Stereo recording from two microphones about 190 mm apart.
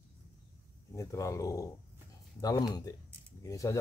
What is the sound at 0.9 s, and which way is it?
Speech, 15° left (ahead or behind).